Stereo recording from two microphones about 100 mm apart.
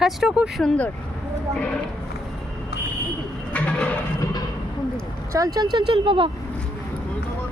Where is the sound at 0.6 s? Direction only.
15° left (ahead or behind).